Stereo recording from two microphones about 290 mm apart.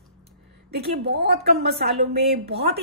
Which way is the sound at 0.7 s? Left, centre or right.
Right.